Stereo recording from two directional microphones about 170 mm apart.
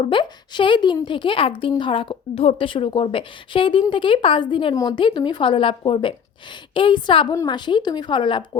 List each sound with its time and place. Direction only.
0.0 s a woman's voice: 30° left (ahead or behind)